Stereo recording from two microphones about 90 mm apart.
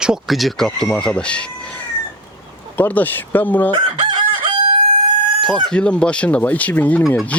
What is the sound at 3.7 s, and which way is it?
Chicken, 60° right (ahead or behind).